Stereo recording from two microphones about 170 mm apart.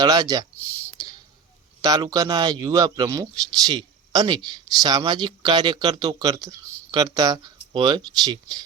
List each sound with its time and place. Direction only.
0.0 s speech: 20° right (ahead or behind)
1.8 s speech: 25° right (ahead or behind)